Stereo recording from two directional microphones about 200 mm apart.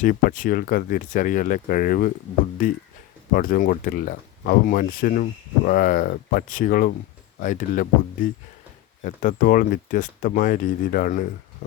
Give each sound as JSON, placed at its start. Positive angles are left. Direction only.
{"t": 0.0, "sound": "speech", "side_deg": 45}
{"t": 3.3, "sound": "speech", "side_deg": 45}